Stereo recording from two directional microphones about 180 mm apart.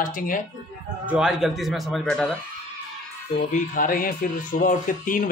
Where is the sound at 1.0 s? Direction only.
5° right (ahead or behind).